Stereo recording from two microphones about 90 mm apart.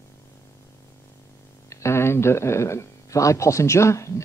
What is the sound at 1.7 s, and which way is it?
Speech, 30° left (ahead or behind).